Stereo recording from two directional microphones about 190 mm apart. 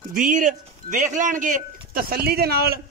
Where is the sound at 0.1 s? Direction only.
45° right (ahead or behind).